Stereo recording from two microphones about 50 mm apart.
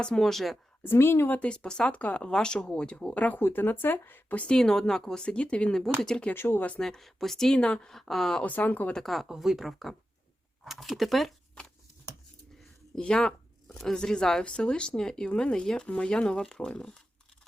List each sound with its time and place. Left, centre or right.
0.0 s speech: centre
0.9 s speech: left
1.4 s speech: centre
1.9 s speech: left
3.2 s speech: left
3.4 s speech: left
4.4 s speech: centre
6.3 s speech: left
6.7 s speech: centre
7.6 s speech: left
7.9 s speech: centre
8.4 s speech: left
9.0 s speech: centre
13.0 s speech: centre